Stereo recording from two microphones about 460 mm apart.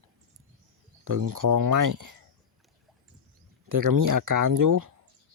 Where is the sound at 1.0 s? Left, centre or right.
Right.